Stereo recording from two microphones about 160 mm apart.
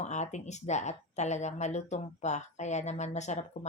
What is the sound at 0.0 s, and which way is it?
Speech, 45° left (ahead or behind).